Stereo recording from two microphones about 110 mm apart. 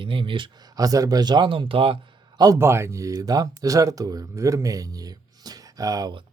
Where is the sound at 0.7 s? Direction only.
35° right (ahead or behind); by 1.9 s 55° right (ahead or behind).